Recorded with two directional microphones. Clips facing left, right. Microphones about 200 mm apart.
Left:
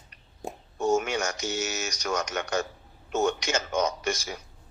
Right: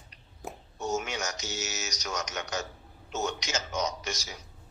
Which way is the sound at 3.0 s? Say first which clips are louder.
Left 7 dB; 55° left (ahead or behind).